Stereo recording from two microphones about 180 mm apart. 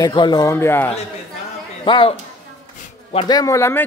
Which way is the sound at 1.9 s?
25° left (ahead or behind).